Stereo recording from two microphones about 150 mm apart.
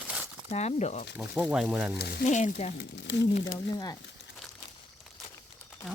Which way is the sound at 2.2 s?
55° left (ahead or behind).